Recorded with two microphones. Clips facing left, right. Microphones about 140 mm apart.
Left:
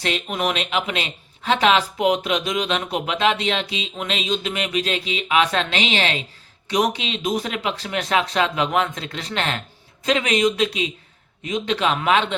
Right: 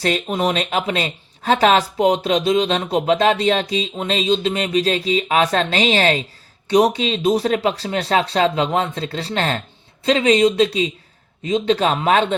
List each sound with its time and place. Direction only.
0.0 s speech: 35° right (ahead or behind)